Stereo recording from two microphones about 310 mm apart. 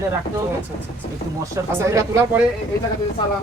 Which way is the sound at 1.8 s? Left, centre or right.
Centre.